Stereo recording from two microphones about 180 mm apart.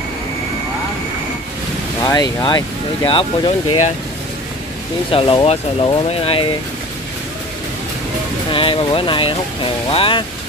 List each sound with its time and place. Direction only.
2.0 s speech: 20° left (ahead or behind)
5.1 s speech: 30° left (ahead or behind)
8.5 s speech: 30° left (ahead or behind)